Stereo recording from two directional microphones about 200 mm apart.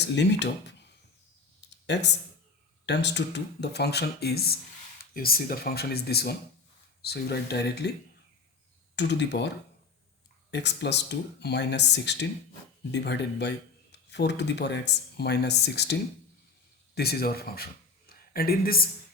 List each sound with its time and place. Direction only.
0.0 s speech: 60° left (ahead or behind)
1.9 s speech: 60° left (ahead or behind)
9.0 s speech: 60° left (ahead or behind)